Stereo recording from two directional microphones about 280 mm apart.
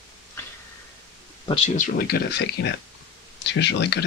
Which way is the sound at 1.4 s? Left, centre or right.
Left.